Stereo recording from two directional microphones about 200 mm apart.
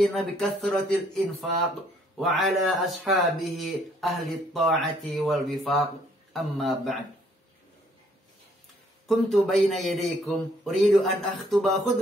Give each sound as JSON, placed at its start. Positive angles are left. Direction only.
{"t": 0.0, "sound": "speech", "side_deg": 0}
{"t": 2.1, "sound": "speech", "side_deg": 0}
{"t": 9.0, "sound": "speech", "side_deg": 0}